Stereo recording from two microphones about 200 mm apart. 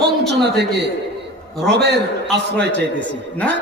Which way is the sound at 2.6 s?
5° left (ahead or behind).